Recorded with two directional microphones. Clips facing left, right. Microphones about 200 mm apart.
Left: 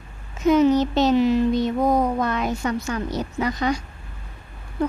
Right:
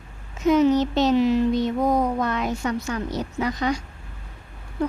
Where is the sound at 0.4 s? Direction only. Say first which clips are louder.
Left 1 dB; 45° left (ahead or behind).